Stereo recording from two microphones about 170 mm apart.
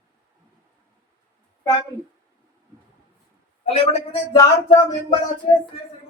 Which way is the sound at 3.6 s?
35° left (ahead or behind).